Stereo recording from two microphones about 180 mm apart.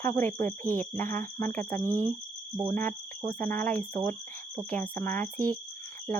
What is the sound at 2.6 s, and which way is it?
Speech, 10° left (ahead or behind).